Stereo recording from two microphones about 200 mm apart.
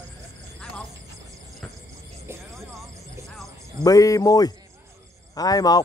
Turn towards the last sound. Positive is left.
turn(degrees=20)  # may be behind; listen again after turning